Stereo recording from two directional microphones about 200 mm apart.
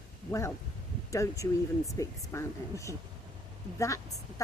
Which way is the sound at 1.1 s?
15° left (ahead or behind).